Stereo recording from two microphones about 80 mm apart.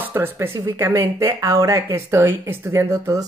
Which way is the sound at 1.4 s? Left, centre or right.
Right.